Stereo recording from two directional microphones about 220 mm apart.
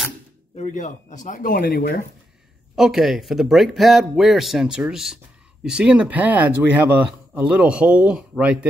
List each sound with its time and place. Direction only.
0.6 s speech: 35° left (ahead or behind)
2.7 s speech: centre (ahead or behind)